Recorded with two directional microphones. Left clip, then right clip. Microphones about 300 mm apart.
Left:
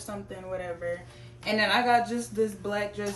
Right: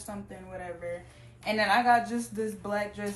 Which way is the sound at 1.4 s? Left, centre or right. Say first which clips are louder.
Even; centre.